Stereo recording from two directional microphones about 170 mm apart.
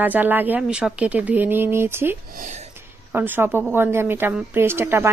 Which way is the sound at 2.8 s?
10° right (ahead or behind).